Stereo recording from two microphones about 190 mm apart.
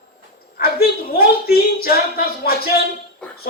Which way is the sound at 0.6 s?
55° left (ahead or behind).